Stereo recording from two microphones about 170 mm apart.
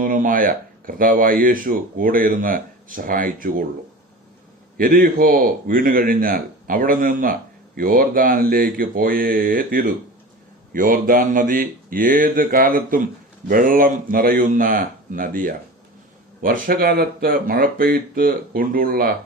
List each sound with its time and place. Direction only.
0.0 s speech: 55° right (ahead or behind)
4.8 s speech: 60° right (ahead or behind)